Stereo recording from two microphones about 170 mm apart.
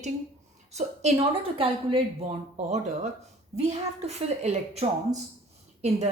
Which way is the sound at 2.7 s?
45° right (ahead or behind).